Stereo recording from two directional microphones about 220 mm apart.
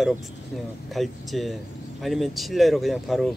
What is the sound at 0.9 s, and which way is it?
Speech, centre (ahead or behind).